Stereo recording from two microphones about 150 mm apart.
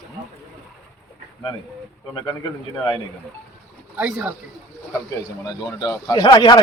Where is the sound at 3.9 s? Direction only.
10° right (ahead or behind).